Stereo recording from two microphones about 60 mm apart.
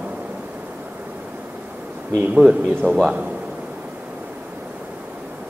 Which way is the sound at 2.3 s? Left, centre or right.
Centre.